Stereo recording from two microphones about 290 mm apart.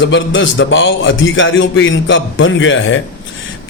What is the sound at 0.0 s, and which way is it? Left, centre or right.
A man's voice, left.